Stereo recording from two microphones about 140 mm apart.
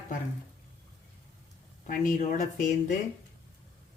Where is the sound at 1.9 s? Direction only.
75° left (ahead or behind).